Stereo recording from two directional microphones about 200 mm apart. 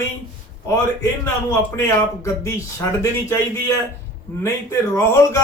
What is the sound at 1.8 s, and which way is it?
Speech, 15° left (ahead or behind).